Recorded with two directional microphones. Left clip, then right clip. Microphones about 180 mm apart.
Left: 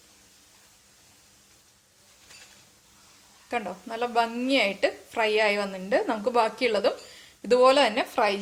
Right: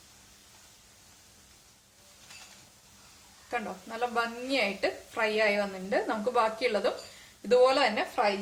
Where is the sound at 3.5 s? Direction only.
50° left (ahead or behind).